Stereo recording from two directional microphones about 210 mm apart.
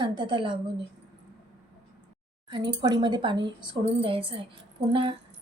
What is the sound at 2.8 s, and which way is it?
A woman's voice, 20° right (ahead or behind).